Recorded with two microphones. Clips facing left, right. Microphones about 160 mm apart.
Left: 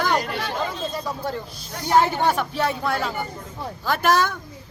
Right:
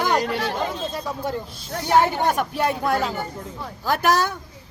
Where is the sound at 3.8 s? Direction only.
40° right (ahead or behind).